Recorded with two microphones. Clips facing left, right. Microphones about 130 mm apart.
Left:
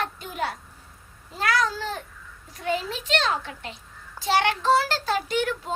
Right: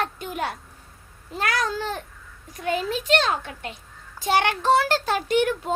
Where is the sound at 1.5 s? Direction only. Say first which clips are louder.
Left 1 dB; 50° right (ahead or behind).